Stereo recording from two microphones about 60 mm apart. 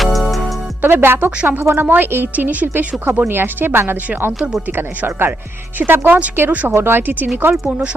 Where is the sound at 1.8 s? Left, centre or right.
Right.